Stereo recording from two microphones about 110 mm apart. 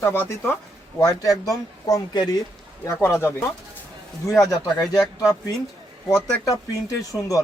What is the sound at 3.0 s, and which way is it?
Speech, 20° left (ahead or behind).